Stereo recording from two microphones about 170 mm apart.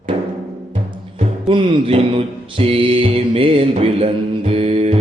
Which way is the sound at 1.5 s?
30° right (ahead or behind).